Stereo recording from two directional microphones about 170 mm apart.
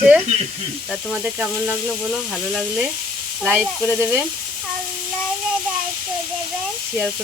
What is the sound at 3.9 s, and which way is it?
Sizzle, 15° right (ahead or behind).